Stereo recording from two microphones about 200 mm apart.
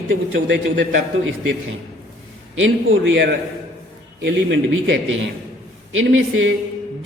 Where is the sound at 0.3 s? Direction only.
65° right (ahead or behind).